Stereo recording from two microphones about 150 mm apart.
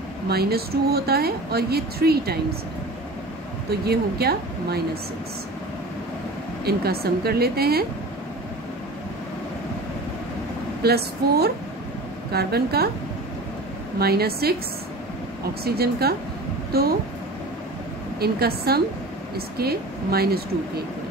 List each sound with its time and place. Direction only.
0.3 s speech: 90° right
3.8 s speech: 90° right
6.6 s speech: 90° right
10.8 s speech: 90° right
13.9 s speech: 90° right
15.6 s speech: 90° right
18.2 s speech: 90° right